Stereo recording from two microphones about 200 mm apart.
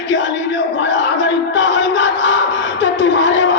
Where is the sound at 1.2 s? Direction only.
65° left (ahead or behind).